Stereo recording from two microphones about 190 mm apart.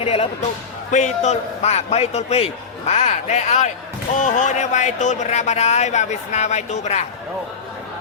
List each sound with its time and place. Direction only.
0.0 s speech: 30° left (ahead or behind)